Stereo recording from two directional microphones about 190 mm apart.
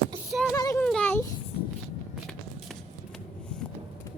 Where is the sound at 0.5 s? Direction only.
15° left (ahead or behind).